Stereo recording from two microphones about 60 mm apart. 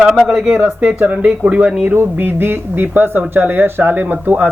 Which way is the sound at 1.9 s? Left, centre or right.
Right.